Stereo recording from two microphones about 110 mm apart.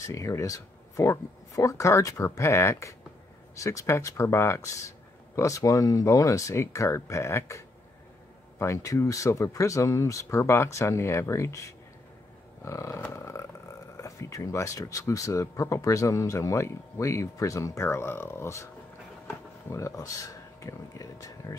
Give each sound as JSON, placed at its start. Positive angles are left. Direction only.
{"t": 0.0, "sound": "speech", "side_deg": 30}
{"t": 13.1, "sound": "a sound", "side_deg": 25}
{"t": 13.9, "sound": "speech", "side_deg": 30}